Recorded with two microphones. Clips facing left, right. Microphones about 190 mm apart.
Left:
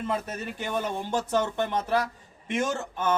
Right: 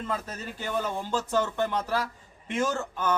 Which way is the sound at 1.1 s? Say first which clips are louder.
Left 1 dB; 20° left (ahead or behind).